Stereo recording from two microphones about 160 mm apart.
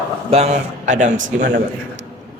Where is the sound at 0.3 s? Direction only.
40° right (ahead or behind).